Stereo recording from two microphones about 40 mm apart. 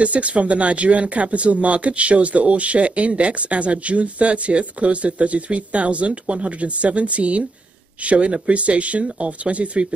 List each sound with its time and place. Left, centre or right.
0.0 s speech: right